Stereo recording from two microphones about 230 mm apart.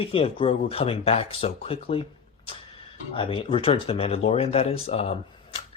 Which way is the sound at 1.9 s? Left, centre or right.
Left.